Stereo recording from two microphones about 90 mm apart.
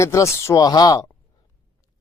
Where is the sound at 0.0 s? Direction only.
35° left (ahead or behind).